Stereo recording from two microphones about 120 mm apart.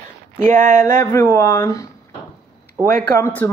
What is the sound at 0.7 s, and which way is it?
Speech, 25° left (ahead or behind).